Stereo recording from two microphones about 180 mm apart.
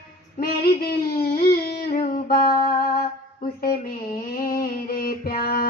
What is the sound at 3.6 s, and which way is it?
Mantra, 55° left (ahead or behind).